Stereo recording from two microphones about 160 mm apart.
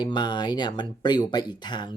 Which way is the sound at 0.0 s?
30° left (ahead or behind).